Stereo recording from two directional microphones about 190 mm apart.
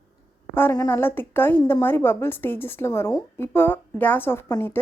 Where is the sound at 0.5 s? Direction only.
15° left (ahead or behind).